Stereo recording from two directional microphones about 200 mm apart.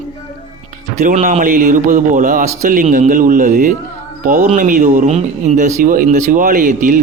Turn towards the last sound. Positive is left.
turn(degrees=-40)  # may be behind; listen again after turning